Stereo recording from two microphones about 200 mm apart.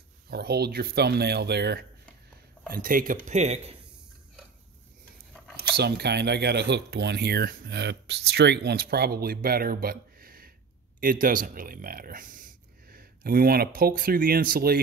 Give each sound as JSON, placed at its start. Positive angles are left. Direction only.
{"t": 0.3, "sound": "speech", "side_deg": -55}
{"t": 2.7, "sound": "speech", "side_deg": -45}
{"t": 5.8, "sound": "speech", "side_deg": -55}